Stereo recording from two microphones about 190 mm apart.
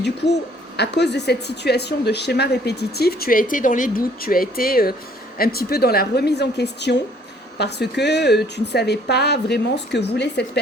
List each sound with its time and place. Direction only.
0.8 s speech: 60° left (ahead or behind)